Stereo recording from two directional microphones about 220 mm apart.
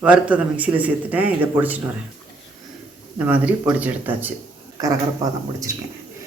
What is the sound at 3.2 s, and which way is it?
A man's voice, 5° right (ahead or behind).